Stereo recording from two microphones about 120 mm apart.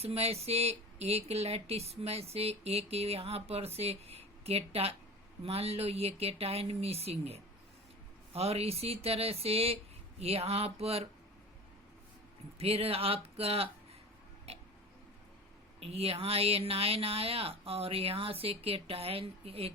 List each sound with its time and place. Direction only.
0.0 s speech: 60° right (ahead or behind)
12.5 s speech: 55° right (ahead or behind)
14.5 s tick-tock: 60° right (ahead or behind)
15.8 s speech: 55° right (ahead or behind)